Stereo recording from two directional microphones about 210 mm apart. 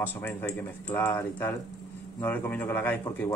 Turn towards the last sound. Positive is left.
turn(degrees=10)  # may be behind; listen again after turning